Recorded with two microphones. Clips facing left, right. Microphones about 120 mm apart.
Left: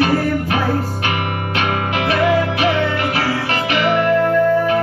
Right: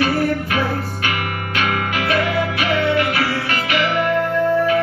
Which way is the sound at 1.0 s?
30° left (ahead or behind).